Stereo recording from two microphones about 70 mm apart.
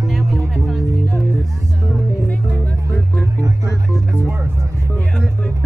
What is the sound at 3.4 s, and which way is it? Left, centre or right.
Music, right.